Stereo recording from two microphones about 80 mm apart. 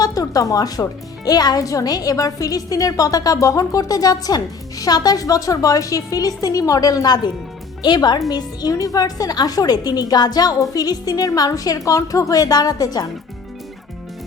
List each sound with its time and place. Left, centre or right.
0.0 s speech: left